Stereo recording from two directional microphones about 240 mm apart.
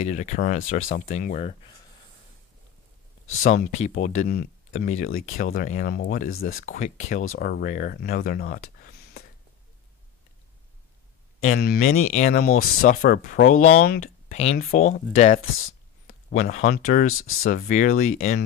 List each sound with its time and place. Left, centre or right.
0.0 s speech: left
3.4 s speech: left
8.7 s a sound: left
11.4 s speech: left
17.0 s speech: left
17.4 s speech: left